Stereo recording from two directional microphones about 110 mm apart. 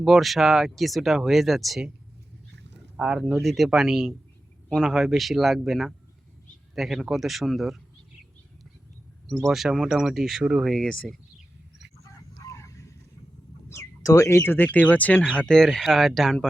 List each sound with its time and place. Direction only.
0.0 s speech: centre (ahead or behind)
3.0 s speech: 5° right (ahead or behind)
9.5 s speech: 5° right (ahead or behind)
12.0 s a sound: 30° left (ahead or behind)
13.7 s speech: 30° left (ahead or behind); by 16.5 s 5° left (ahead or behind)